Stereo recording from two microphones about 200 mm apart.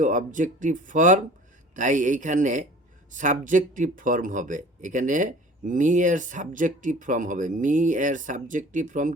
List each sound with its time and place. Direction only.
0.0 s speech: 40° right (ahead or behind)